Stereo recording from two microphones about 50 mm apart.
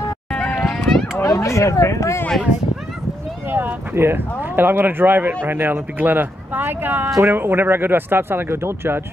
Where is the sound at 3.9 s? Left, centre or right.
Right.